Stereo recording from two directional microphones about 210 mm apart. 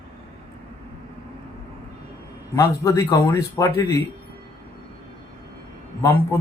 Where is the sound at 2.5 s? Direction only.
15° left (ahead or behind).